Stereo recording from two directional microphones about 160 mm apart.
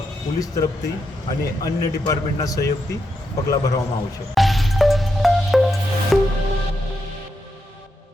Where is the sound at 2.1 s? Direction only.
20° left (ahead or behind).